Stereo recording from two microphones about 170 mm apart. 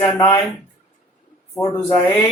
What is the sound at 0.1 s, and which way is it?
Speech, 20° left (ahead or behind).